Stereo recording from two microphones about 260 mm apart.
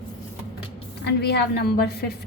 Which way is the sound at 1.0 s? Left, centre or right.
Left.